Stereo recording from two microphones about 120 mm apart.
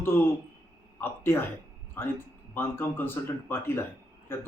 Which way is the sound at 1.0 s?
20° left (ahead or behind).